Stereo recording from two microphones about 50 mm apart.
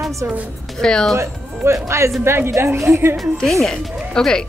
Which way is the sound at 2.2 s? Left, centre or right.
Right.